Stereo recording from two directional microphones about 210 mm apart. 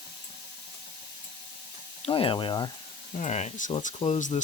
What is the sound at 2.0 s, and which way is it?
Speech, 25° left (ahead or behind).